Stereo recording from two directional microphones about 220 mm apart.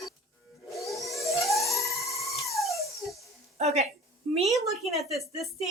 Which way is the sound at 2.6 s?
Centre (ahead or behind).